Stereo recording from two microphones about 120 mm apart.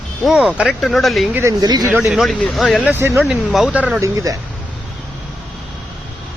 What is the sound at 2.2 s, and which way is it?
Speech, centre (ahead or behind).